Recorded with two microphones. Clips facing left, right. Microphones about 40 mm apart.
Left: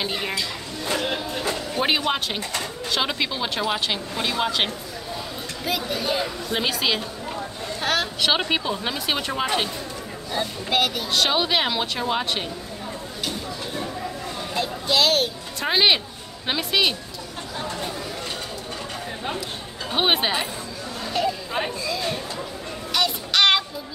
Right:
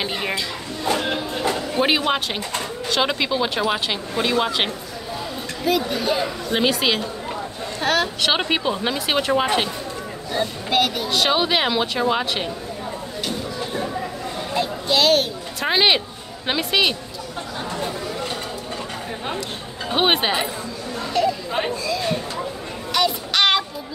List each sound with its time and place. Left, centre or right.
0.0 s speech: centre
1.0 s a sound: centre
1.8 s speech: centre
8.3 s speech: centre
10.3 s speech: centre
14.5 s music: centre
16.4 s speech: centre
19.9 s speech: centre
21.1 s chatter: centre
21.8 s a sound: centre
22.9 s child singing: centre